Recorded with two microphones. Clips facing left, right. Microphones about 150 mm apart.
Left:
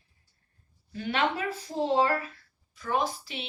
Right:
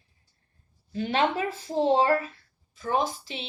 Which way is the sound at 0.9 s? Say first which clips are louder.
Right 3 dB; 25° right (ahead or behind).